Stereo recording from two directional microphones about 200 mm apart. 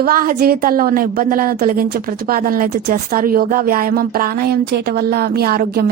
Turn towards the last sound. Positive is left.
turn(degrees=-50)  # may be behind; listen again after turning